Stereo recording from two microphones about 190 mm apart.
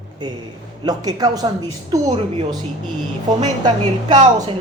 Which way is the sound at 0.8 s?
20° right (ahead or behind).